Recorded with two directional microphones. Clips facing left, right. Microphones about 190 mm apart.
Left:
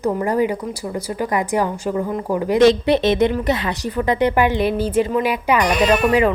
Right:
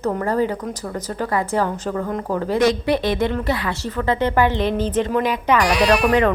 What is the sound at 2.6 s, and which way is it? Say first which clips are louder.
A woman's voice: left 6 dB; 25° left (ahead or behind).